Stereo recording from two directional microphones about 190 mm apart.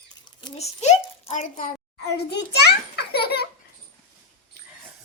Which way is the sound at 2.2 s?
60° left (ahead or behind).